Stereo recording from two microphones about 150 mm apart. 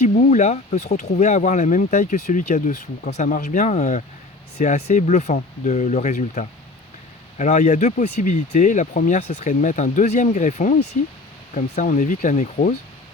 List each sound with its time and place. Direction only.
0.1 s speech: 50° left (ahead or behind)
11.8 s speech: 55° left (ahead or behind)